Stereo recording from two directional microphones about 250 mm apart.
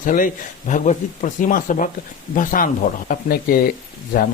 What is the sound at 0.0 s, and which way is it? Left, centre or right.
Speech, left.